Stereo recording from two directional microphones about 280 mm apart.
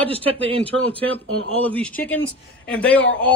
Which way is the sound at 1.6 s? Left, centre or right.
Centre.